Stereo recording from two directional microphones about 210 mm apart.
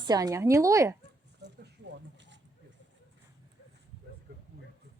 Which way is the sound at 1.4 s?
55° right (ahead or behind).